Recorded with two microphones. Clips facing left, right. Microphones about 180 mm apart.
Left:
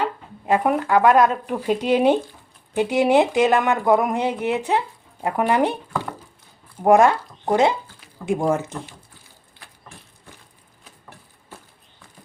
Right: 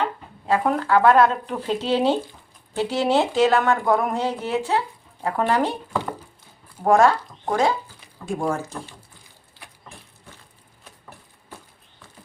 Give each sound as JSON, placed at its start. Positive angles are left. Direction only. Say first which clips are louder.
{"t": 0.0, "sound": "speech", "louder": "left 1 dB", "side_deg": 15}
{"t": 6.8, "sound": "speech", "louder": "left 2 dB", "side_deg": 15}